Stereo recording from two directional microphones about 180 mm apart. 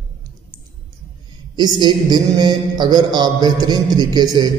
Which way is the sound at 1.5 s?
25° right (ahead or behind).